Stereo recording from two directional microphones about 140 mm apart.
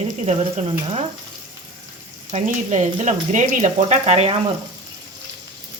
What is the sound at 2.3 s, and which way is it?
Speech, 60° right (ahead or behind).